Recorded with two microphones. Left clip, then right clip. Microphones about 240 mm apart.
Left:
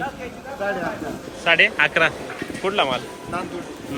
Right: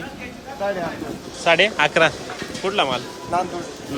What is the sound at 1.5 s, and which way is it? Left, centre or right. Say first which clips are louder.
Speech: even; centre.